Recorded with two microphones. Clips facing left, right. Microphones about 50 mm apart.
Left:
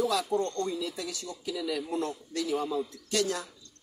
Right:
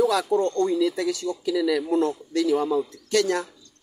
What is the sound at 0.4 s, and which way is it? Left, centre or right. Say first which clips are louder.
Speech: right 8 dB; right.